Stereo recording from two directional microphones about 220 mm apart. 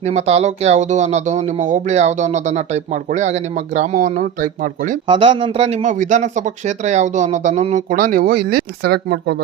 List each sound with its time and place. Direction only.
0.0 s speech: 30° right (ahead or behind)
5.0 s speech: 20° right (ahead or behind); by 9.4 s 50° right (ahead or behind)